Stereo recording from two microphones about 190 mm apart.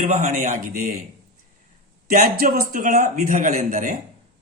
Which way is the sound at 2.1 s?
50° right (ahead or behind).